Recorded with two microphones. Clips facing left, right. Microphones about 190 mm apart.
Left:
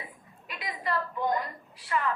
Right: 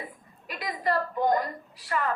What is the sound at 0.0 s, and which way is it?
A woman's voice, 40° right (ahead or behind).